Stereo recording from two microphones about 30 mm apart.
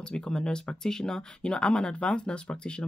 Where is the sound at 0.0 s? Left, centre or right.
Left.